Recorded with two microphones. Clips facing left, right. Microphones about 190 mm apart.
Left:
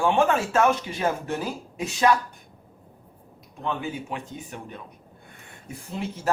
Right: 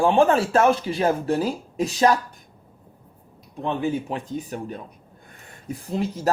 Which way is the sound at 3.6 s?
35° right (ahead or behind).